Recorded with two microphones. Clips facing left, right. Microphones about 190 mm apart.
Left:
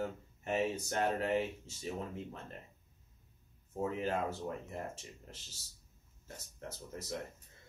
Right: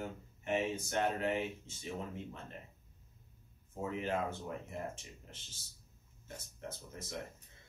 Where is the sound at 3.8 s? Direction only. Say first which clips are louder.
Left 2 dB; 40° left (ahead or behind).